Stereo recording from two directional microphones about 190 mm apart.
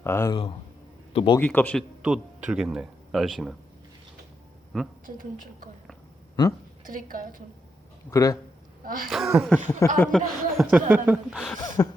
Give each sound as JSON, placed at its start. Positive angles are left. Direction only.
{"t": 0.0, "sound": "speech", "side_deg": 15}
{"t": 1.1, "sound": "speech", "side_deg": 25}
{"t": 1.4, "sound": "speech", "side_deg": 10}
{"t": 2.0, "sound": "speech", "side_deg": -5}
{"t": 4.7, "sound": "speech", "side_deg": 0}
{"t": 6.4, "sound": "a man's voice", "side_deg": 20}
{"t": 6.8, "sound": "a woman's voice", "side_deg": -45}
{"t": 8.1, "sound": "a man's voice", "side_deg": 20}
{"t": 8.8, "sound": "speech", "side_deg": -50}
{"t": 9.0, "sound": "speech", "side_deg": 0}
{"t": 9.4, "sound": "speech", "side_deg": 10}
{"t": 11.8, "sound": "speech", "side_deg": 15}